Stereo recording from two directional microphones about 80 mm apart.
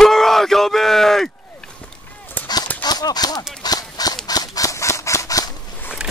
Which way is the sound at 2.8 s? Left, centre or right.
Left.